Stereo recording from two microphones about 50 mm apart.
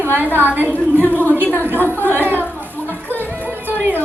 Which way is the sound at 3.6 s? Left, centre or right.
Right.